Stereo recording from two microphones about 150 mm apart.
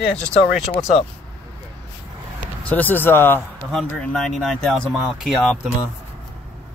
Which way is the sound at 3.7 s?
5° left (ahead or behind).